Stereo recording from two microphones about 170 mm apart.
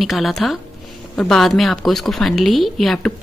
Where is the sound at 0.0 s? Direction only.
Centre (ahead or behind).